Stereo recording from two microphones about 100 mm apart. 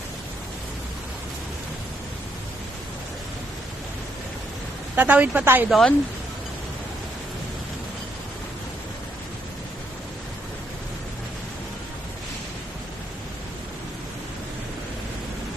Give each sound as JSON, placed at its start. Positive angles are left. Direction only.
{"t": 4.9, "sound": "a woman's voice", "side_deg": -15}
{"t": 5.6, "sound": "speech", "side_deg": 0}